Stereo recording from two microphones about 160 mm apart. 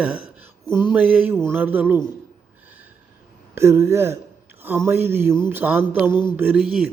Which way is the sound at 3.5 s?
15° right (ahead or behind).